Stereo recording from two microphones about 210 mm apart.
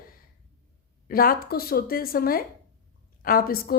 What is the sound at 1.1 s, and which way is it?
A woman's voice, 45° left (ahead or behind).